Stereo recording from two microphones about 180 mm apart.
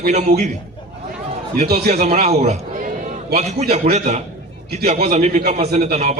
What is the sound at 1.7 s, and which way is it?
A man's voice, 40° right (ahead or behind).